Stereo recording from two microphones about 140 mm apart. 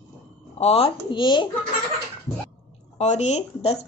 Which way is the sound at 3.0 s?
55° left (ahead or behind).